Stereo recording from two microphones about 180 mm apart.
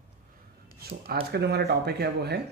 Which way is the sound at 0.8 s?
60° right (ahead or behind).